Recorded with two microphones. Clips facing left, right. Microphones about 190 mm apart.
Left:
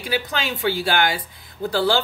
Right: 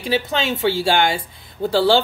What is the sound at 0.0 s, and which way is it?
Speech, 25° right (ahead or behind).